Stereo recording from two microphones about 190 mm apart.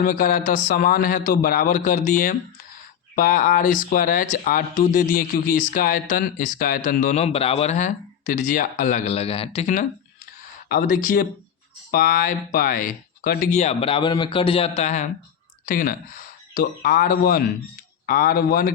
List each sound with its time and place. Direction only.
0.0 s speech: 45° left (ahead or behind)
10.7 s speech: 45° left (ahead or behind)